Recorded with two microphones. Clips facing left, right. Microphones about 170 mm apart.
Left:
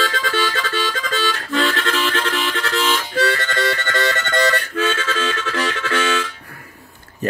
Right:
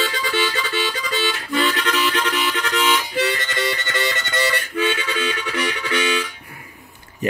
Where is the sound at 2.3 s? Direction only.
45° left (ahead or behind).